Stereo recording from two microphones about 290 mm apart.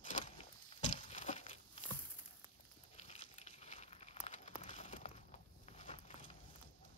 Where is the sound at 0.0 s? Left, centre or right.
Left.